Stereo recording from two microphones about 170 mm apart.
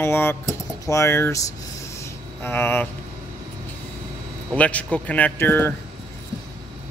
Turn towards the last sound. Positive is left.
turn(degrees=15)  # may be behind; listen again after turning